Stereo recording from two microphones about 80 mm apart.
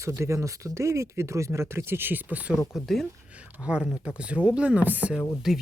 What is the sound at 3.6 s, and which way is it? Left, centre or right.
Speech, centre.